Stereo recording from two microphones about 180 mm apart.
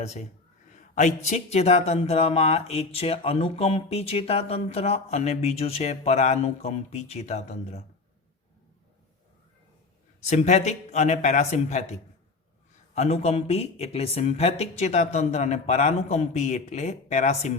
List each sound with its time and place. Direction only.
0.0 s speech: 35° left (ahead or behind)
10.2 s speech: 40° left (ahead or behind)